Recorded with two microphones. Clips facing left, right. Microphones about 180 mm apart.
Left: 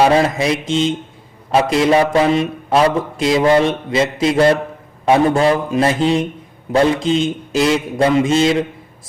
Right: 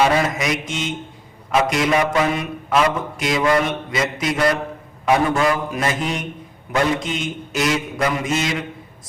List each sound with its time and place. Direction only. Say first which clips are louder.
0.0 s a man's voice: left 5 dB; 30° left (ahead or behind)